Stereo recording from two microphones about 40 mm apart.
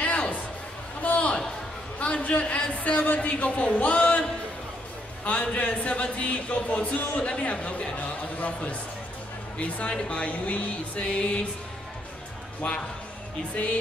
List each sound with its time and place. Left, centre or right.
0.0 s music: left
1.0 s a sound: left
2.2 s speech: left
5.2 s speech: left
12.6 s speech: left